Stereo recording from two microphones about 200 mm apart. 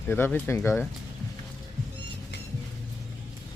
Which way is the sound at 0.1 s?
10° left (ahead or behind).